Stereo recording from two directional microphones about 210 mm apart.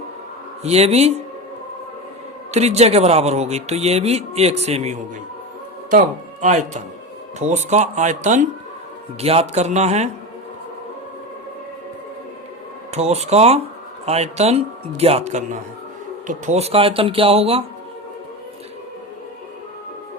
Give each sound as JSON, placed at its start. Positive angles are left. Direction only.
{"t": 0.6, "sound": "a man's voice", "side_deg": -30}
{"t": 2.5, "sound": "a man's voice", "side_deg": -30}
{"t": 12.9, "sound": "a man's voice", "side_deg": -30}